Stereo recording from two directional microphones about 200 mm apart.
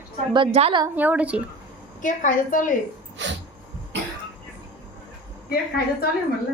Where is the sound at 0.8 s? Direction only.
10° right (ahead or behind).